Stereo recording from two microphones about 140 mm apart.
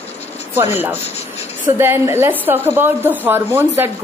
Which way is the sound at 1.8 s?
15° right (ahead or behind).